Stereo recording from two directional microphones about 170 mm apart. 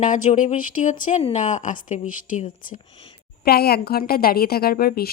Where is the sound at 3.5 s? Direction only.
65° left (ahead or behind).